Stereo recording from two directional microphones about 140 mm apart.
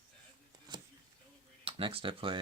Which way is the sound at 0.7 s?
35° right (ahead or behind).